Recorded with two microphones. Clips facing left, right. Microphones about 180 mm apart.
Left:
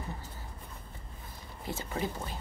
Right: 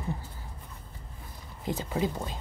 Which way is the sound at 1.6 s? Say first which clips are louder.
Right 5 dB; 15° right (ahead or behind).